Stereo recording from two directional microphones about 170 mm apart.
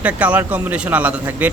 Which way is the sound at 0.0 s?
10° right (ahead or behind).